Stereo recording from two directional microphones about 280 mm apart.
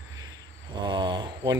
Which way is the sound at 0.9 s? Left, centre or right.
Centre.